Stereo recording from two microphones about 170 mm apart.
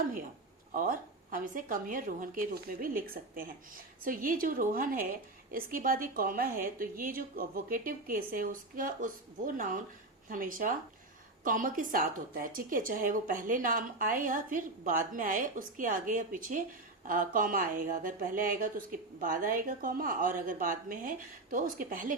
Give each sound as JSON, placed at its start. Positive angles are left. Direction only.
{"t": 0.7, "sound": "a woman's voice", "side_deg": -55}